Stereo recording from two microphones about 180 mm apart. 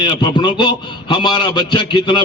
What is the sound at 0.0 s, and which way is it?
A man's voice, 25° left (ahead or behind).